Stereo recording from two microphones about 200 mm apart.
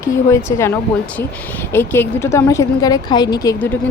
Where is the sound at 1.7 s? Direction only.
10° left (ahead or behind).